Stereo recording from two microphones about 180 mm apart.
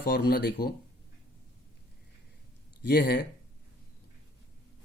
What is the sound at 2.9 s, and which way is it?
Speech, 60° left (ahead or behind).